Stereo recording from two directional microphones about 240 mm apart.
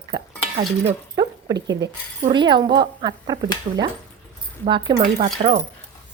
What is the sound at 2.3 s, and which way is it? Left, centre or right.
Speech, centre.